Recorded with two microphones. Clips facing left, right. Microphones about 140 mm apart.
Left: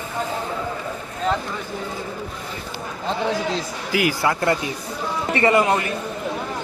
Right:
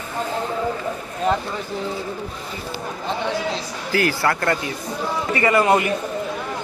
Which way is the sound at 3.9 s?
10° left (ahead or behind).